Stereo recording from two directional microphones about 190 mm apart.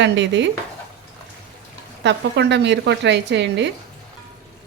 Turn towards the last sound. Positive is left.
turn(degrees=-65)  # may be behind; listen again after turning